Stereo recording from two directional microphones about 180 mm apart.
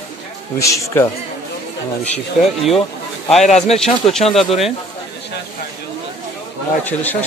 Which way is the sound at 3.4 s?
40° left (ahead or behind).